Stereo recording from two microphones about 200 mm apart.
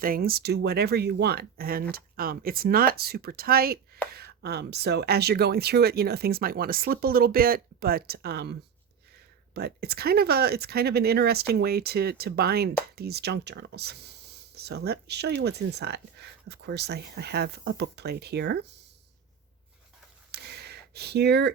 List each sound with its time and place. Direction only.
0.0 s speech: 45° right (ahead or behind)
9.6 s speech: 50° right (ahead or behind)
20.3 s a sound: 55° right (ahead or behind)